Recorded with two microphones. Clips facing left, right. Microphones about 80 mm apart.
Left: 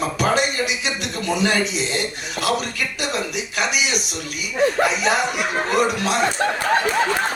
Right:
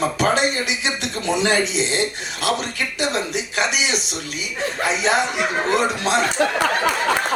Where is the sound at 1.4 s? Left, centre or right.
Right.